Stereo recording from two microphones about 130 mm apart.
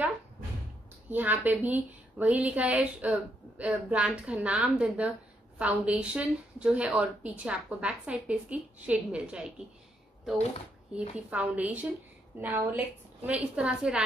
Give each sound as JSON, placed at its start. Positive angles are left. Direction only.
{"t": 1.1, "sound": "a woman's voice", "side_deg": -15}
{"t": 11.0, "sound": "a woman's voice", "side_deg": -10}